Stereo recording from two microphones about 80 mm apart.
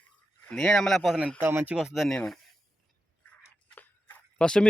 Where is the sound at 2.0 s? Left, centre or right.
Centre.